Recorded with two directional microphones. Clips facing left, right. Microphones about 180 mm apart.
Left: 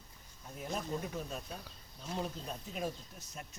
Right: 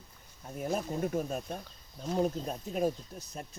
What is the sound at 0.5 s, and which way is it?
Speech, 50° right (ahead or behind).